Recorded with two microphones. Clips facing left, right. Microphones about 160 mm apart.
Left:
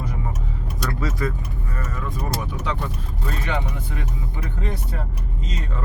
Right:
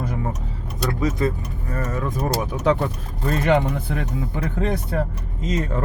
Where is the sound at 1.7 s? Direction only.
45° right (ahead or behind).